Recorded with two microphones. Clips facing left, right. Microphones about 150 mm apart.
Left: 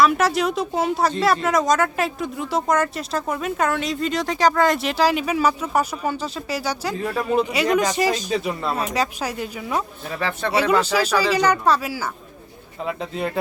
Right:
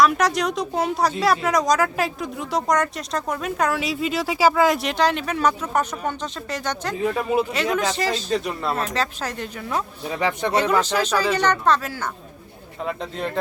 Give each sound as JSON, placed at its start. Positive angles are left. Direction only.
{"t": 0.0, "sound": "speech", "side_deg": 0}
{"t": 7.3, "sound": "speech", "side_deg": -5}
{"t": 7.8, "sound": "speech", "side_deg": 10}
{"t": 10.2, "sound": "speech", "side_deg": -15}
{"t": 10.5, "sound": "speech", "side_deg": 10}